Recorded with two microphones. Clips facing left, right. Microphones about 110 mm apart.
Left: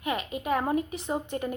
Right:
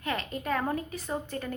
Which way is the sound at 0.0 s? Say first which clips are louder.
Left 2 dB; 15° left (ahead or behind).